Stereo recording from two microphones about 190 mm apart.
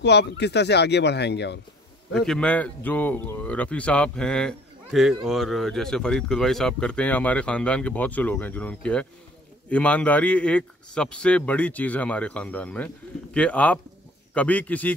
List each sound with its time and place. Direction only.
0.0 s speech: 60° left (ahead or behind)
2.1 s a man's voice: 5° left (ahead or behind)